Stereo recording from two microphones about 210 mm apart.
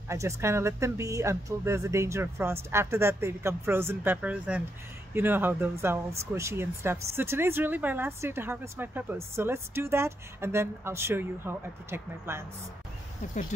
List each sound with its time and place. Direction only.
0.1 s speech: 15° right (ahead or behind)
13.3 s speech: 35° left (ahead or behind)